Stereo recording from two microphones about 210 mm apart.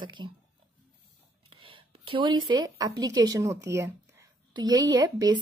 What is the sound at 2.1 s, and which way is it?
A woman's voice, 20° right (ahead or behind).